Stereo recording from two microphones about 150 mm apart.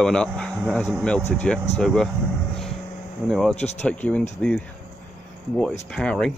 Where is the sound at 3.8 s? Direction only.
10° left (ahead or behind).